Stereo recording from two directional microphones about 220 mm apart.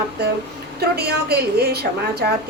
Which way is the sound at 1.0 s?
45° right (ahead or behind).